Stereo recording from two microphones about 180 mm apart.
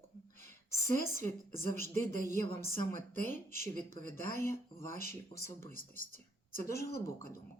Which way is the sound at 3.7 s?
40° right (ahead or behind).